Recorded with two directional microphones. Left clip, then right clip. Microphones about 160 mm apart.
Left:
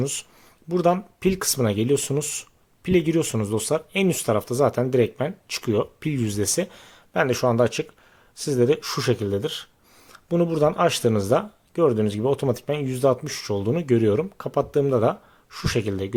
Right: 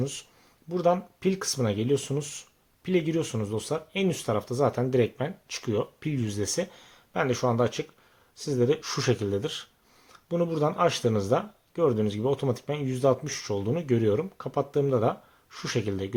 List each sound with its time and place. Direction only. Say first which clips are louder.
0.0 s speech: left 5 dB; 45° left (ahead or behind); by 16.1 s 30° left (ahead or behind)